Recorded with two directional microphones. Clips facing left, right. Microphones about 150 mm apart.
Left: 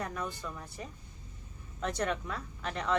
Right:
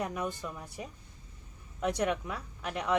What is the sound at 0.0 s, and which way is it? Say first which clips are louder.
A woman's voice: right 3 dB; 15° right (ahead or behind).